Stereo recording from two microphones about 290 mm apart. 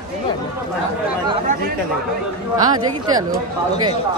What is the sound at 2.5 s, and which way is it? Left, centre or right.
Speech, centre.